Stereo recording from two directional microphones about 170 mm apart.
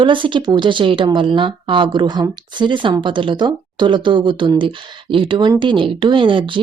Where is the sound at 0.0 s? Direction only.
30° right (ahead or behind).